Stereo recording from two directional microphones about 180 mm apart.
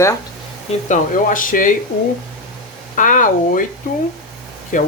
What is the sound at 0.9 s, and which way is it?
Speech, 50° left (ahead or behind).